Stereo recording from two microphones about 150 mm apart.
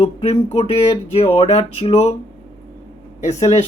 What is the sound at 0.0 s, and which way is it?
Speech, 45° left (ahead or behind).